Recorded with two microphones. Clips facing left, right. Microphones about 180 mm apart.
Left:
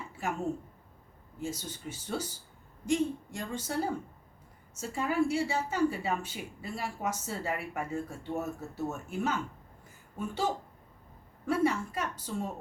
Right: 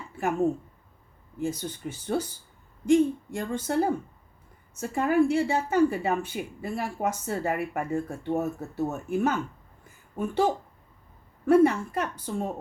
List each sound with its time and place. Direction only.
1.4 s a woman's voice: 55° right (ahead or behind)